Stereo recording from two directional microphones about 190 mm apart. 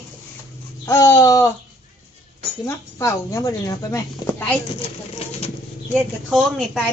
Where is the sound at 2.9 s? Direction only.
15° left (ahead or behind).